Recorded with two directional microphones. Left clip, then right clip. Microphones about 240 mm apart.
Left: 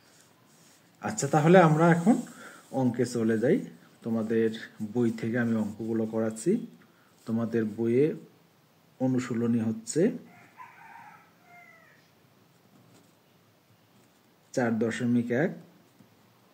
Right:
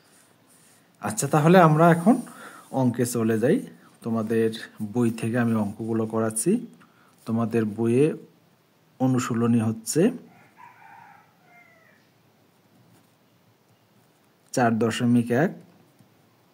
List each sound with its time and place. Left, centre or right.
0.9 s speech: right
14.5 s speech: right